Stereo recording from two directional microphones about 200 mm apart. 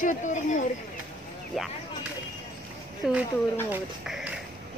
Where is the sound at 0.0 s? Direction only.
40° left (ahead or behind).